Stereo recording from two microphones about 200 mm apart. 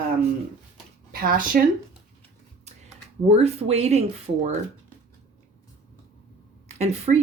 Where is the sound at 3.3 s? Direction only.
30° right (ahead or behind).